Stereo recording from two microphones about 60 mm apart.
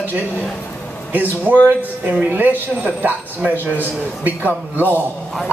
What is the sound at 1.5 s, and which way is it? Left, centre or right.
A woman's voice, right.